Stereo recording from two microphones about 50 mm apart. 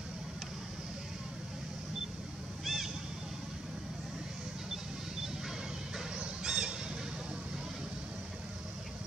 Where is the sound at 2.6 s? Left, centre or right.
Centre.